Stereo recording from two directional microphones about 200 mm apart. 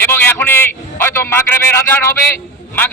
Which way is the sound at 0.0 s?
10° left (ahead or behind).